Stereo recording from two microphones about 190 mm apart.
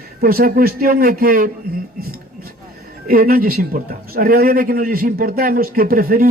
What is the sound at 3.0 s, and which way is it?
Speech, 50° right (ahead or behind).